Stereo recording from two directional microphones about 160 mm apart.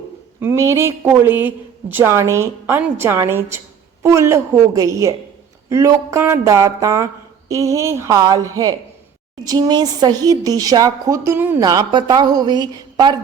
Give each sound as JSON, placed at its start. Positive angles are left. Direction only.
{"t": 0.3, "sound": "a woman's voice", "side_deg": -15}